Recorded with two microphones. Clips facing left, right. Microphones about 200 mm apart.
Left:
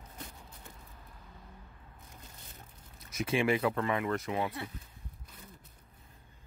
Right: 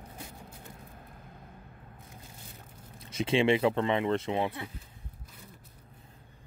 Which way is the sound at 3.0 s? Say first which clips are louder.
Right 4 dB; 30° right (ahead or behind).